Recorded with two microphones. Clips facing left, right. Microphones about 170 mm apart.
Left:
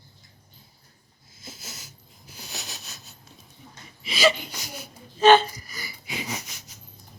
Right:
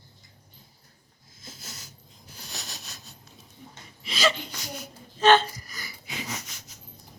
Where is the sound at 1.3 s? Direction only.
5° left (ahead or behind).